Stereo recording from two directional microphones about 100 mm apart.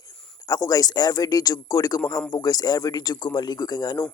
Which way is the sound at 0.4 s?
35° left (ahead or behind).